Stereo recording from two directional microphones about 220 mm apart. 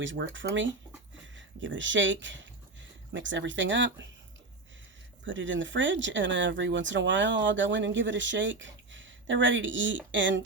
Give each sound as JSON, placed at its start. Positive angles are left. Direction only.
{"t": 0.0, "sound": "speech", "side_deg": -60}
{"t": 5.2, "sound": "speech", "side_deg": -60}